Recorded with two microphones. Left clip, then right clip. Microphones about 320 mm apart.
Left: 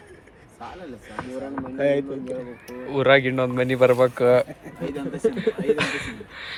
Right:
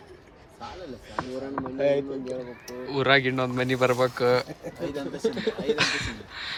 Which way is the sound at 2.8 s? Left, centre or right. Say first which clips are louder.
Left 4 dB; centre.